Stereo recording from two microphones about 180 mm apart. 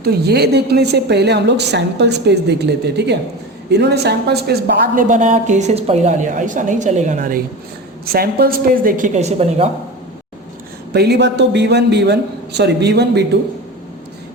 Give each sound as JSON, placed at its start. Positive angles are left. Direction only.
{"t": 0.0, "sound": "a woman's voice", "side_deg": -65}
{"t": 5.0, "sound": "a woman's voice", "side_deg": -45}
{"t": 8.0, "sound": "a woman's voice", "side_deg": -60}
{"t": 10.9, "sound": "a woman's voice", "side_deg": -65}